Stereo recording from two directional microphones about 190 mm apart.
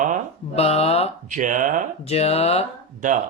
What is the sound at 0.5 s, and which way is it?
Speech, 30° left (ahead or behind).